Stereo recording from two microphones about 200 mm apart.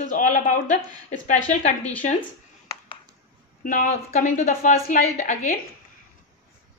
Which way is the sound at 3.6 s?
40° left (ahead or behind).